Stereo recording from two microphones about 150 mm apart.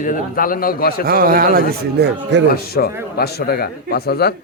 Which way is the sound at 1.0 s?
80° right.